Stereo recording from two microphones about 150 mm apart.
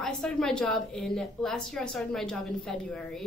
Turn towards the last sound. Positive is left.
turn(degrees=5)  # may be behind; listen again after turning